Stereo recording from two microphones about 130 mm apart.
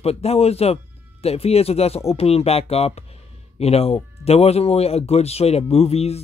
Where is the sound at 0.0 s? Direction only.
50° left (ahead or behind).